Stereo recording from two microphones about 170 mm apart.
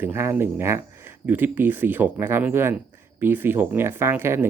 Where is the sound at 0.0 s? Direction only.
15° right (ahead or behind).